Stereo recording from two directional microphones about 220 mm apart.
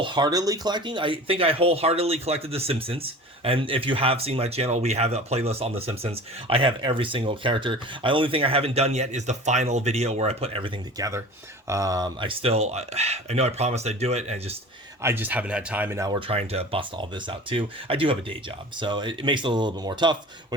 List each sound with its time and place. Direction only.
0.0 s speech: 20° right (ahead or behind)
15.0 s speech: 10° right (ahead or behind)